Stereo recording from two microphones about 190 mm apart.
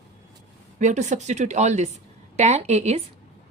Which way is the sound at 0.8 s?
40° right (ahead or behind).